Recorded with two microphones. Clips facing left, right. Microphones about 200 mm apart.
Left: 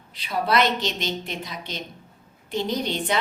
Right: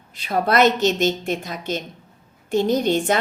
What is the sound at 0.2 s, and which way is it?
A woman's voice, 50° right (ahead or behind).